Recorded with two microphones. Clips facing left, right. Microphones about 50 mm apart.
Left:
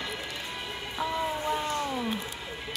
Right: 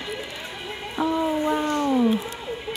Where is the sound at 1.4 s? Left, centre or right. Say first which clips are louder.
Right 7 dB; right.